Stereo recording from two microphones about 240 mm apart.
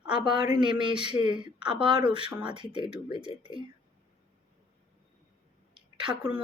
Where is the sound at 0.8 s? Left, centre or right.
Centre.